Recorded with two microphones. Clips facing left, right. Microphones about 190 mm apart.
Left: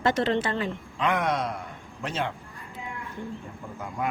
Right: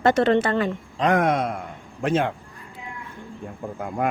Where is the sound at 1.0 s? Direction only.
45° right (ahead or behind).